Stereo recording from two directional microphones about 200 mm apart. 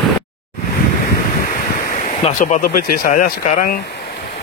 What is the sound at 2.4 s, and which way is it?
Speech, 45° left (ahead or behind).